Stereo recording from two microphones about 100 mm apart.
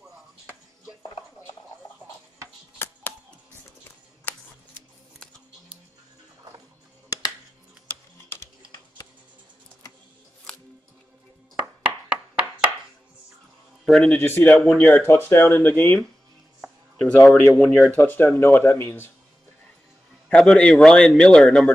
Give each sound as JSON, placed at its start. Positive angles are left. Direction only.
{"t": 2.8, "sound": "music", "side_deg": 20}
{"t": 4.2, "sound": "shuffling cards", "side_deg": 15}
{"t": 7.1, "sound": "music", "side_deg": 40}
{"t": 10.5, "sound": "music", "side_deg": 5}
{"t": 12.1, "sound": "a sound", "side_deg": -10}
{"t": 13.8, "sound": "a man's voice", "side_deg": 5}
{"t": 14.1, "sound": "speech", "side_deg": 20}
{"t": 17.0, "sound": "speech", "side_deg": 5}
{"t": 17.9, "sound": "speech", "side_deg": 20}
{"t": 20.2, "sound": "a man's voice", "side_deg": 10}